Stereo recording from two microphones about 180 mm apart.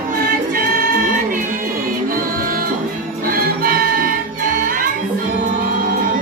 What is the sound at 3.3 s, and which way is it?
Music, 55° right (ahead or behind).